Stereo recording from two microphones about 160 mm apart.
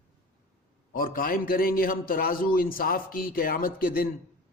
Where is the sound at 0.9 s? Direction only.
65° left (ahead or behind).